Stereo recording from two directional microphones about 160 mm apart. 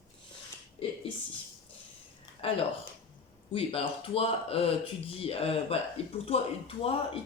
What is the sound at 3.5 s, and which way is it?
Speech, 35° left (ahead or behind).